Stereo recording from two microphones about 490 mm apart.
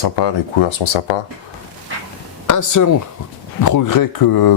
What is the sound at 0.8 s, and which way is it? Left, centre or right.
Speech, left.